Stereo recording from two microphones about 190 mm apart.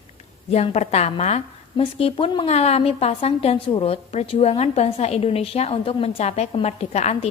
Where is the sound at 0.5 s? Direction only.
35° left (ahead or behind).